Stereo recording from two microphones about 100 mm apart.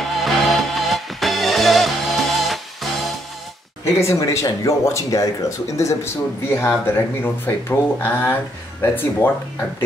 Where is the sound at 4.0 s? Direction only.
30° left (ahead or behind).